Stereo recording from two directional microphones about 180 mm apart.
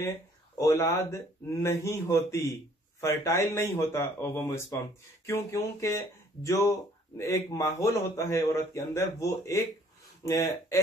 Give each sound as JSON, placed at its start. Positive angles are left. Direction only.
{"t": 0.0, "sound": "a man's voice", "side_deg": 15}